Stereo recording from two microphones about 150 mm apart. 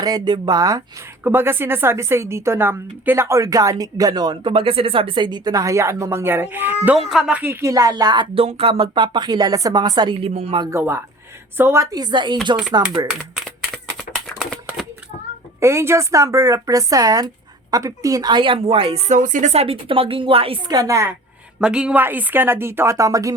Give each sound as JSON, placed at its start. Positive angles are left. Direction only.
{"t": 0.0, "sound": "a woman's voice", "side_deg": -25}
{"t": 1.2, "sound": "a woman's voice", "side_deg": -15}
{"t": 8.4, "sound": "speech", "side_deg": -40}
{"t": 10.6, "sound": "a woman's voice", "side_deg": -20}
{"t": 13.3, "sound": "typing", "side_deg": 0}
{"t": 14.1, "sound": "typewriter", "side_deg": 0}
{"t": 15.6, "sound": "a woman's voice", "side_deg": -15}
{"t": 21.6, "sound": "a woman's voice", "side_deg": -5}